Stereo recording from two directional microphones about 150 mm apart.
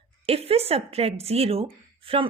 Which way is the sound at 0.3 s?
40° right (ahead or behind).